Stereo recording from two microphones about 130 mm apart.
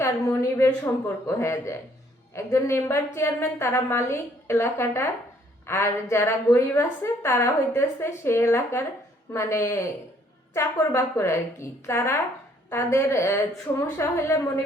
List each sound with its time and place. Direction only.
0.5 s a woman's voice: 20° left (ahead or behind)